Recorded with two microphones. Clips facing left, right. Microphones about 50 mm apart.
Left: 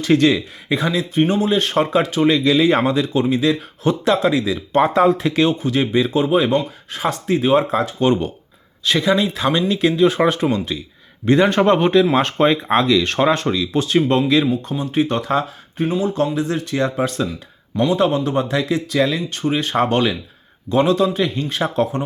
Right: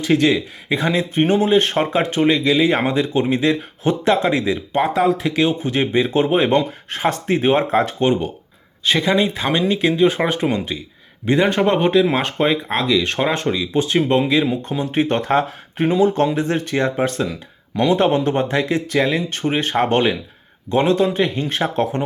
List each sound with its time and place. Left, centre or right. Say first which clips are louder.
0.0 s a man's voice: left 1 dB; centre
0.9 s a man's voice: right 1 dB; right; by 2.8 s centre
2.8 s speech: left 1 dB; right
4.7 s speech: left 4 dB; centre
5.5 s speech: left 1 dB; right
8.0 s a man's voice: left 1 dB; centre
11.3 s a man's voice: left 2 dB; centre
13.3 s speech: even; right
14.4 s speech: even; right
15.8 s speech: right 3 dB; right